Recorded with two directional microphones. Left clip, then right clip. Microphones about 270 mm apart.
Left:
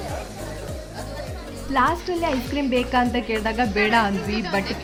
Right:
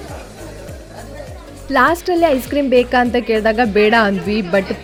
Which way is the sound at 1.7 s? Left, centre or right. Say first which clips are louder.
Right 7 dB; right.